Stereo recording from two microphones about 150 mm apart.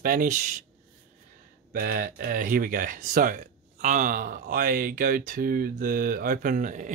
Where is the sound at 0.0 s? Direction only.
65° right (ahead or behind).